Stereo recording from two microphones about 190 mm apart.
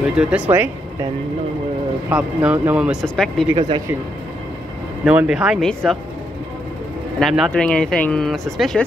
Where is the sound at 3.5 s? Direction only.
25° right (ahead or behind).